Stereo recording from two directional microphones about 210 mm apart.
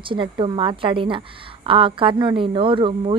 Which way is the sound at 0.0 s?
25° right (ahead or behind).